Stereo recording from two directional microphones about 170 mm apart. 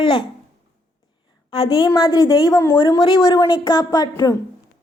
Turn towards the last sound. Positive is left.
turn(degrees=20)  # may be behind; listen again after turning